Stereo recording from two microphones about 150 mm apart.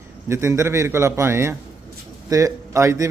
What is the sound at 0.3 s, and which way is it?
Speech, 20° right (ahead or behind).